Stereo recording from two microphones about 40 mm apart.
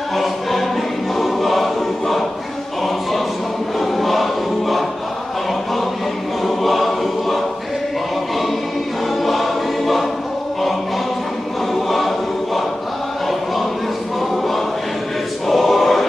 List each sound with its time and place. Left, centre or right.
0.1 s choir: centre
3.8 s choir: centre
6.4 s choir: centre
9.2 s choir: centre
15.4 s choir: centre